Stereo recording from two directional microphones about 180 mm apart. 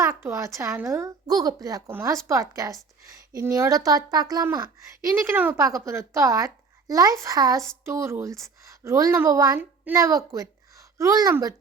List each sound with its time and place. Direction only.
0.0 s a child's voice: 15° right (ahead or behind)